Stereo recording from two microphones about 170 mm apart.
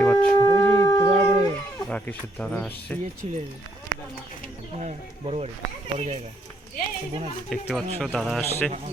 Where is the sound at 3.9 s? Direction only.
60° right (ahead or behind).